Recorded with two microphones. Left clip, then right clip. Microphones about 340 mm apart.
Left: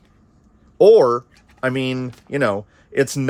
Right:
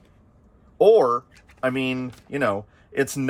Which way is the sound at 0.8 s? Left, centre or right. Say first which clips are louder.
Left 5 dB; left.